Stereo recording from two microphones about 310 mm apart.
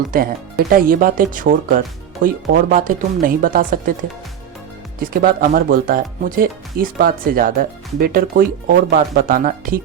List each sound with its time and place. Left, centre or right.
0.1 s speech: right
4.9 s speech: right